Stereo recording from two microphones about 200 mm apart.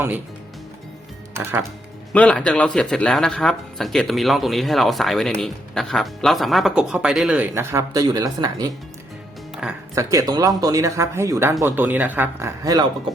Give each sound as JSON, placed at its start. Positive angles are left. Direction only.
{"t": 1.3, "sound": "speech", "side_deg": -10}
{"t": 2.1, "sound": "speech", "side_deg": 5}
{"t": 9.9, "sound": "speech", "side_deg": -15}